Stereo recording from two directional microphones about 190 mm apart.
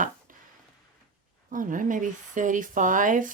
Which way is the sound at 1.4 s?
45° right (ahead or behind).